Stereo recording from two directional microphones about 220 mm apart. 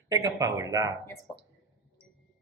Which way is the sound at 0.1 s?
15° right (ahead or behind).